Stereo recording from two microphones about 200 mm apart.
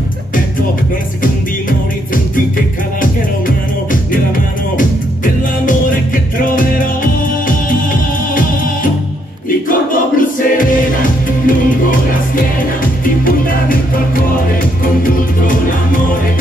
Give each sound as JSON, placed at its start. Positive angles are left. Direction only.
{"t": 3.0, "sound": "music", "side_deg": 45}
{"t": 9.7, "sound": "music", "side_deg": 40}
{"t": 13.0, "sound": "music", "side_deg": 45}